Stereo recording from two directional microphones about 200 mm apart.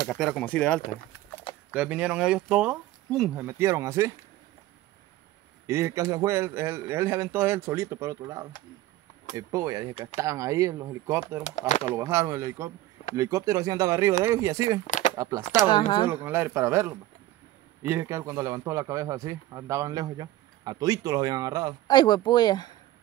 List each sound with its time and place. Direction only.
0.0 s speech: centre (ahead or behind)
1.7 s speech: 5° right (ahead or behind)
5.7 s a man's voice: 15° right (ahead or behind)
11.4 s speech: 35° left (ahead or behind)
11.9 s a man's voice: 15° right (ahead or behind)
14.9 s a sound: 40° left (ahead or behind)
15.1 s a man's voice: 15° right (ahead or behind)
21.8 s speech: 20° left (ahead or behind)